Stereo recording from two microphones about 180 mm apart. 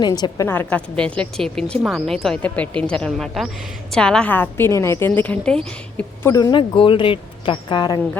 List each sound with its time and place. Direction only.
0.0 s a woman's voice: 20° left (ahead or behind)